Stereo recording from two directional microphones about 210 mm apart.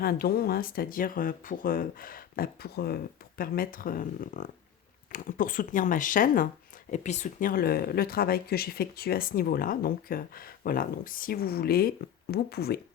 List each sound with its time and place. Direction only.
0.0 s speech: 45° left (ahead or behind)